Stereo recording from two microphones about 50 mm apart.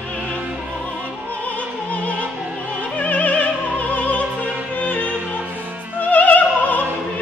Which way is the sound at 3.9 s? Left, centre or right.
Left.